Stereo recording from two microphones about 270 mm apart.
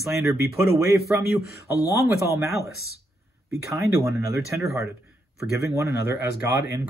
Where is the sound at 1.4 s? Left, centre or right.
Left.